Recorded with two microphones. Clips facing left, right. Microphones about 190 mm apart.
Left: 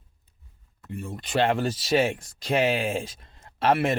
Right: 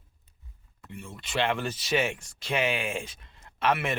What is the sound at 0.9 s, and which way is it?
Speech, 40° left (ahead or behind).